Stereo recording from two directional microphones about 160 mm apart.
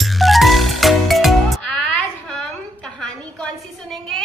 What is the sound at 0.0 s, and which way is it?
Music, centre (ahead or behind).